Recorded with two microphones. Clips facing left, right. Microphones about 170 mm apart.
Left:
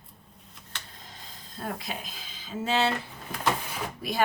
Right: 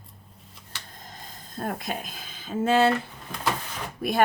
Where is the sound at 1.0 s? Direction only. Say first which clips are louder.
Right 4 dB; 45° right (ahead or behind).